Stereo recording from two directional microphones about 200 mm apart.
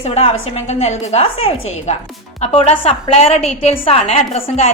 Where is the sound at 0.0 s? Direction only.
30° left (ahead or behind).